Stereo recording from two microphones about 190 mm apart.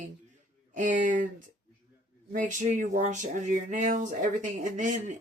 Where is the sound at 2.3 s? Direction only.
40° right (ahead or behind).